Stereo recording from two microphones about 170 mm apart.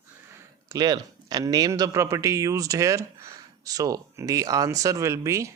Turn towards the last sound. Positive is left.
turn(degrees=-15)  # may be behind; listen again after turning